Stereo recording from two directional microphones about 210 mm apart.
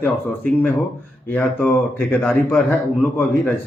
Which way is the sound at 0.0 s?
10° left (ahead or behind).